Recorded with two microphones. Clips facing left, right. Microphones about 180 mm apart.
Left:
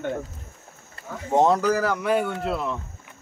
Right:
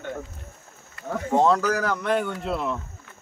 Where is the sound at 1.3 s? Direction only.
20° left (ahead or behind).